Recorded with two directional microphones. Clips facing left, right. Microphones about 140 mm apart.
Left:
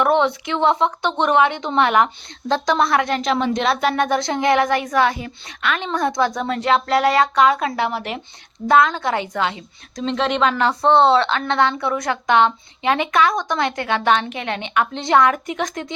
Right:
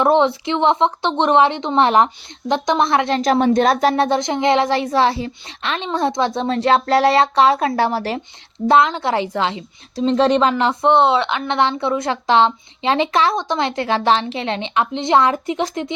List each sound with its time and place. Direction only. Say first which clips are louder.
0.0 s a woman's voice: right 2 dB; 30° right (ahead or behind)
3.2 s speech: right 5 dB; 40° right (ahead or behind)
4.2 s a woman's voice: right 1 dB; 20° right (ahead or behind)
10.5 s a woman's voice: right 1 dB; 20° right (ahead or behind)